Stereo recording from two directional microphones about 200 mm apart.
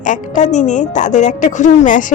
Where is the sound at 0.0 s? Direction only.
40° left (ahead or behind).